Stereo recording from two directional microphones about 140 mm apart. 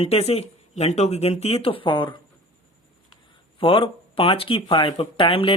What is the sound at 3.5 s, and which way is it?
Speech, 40° left (ahead or behind).